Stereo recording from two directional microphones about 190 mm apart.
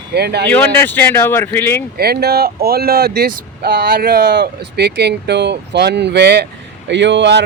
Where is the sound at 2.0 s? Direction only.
55° right (ahead or behind).